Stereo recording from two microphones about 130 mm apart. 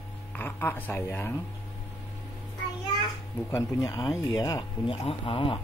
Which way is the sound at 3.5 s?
25° left (ahead or behind).